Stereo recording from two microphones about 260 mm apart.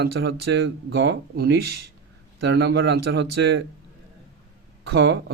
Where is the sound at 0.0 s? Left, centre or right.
Right.